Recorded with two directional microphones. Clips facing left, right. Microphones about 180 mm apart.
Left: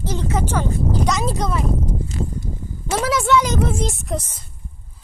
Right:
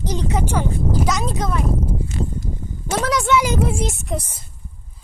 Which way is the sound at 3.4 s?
10° right (ahead or behind).